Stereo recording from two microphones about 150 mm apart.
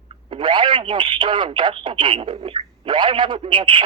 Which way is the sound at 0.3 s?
35° right (ahead or behind).